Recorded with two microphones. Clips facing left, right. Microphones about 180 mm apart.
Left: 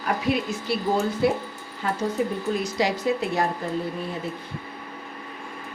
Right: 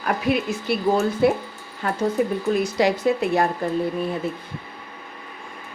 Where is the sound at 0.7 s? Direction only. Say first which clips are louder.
Right 4 dB; 60° right (ahead or behind).